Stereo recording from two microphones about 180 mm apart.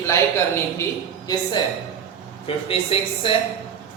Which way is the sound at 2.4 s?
30° left (ahead or behind).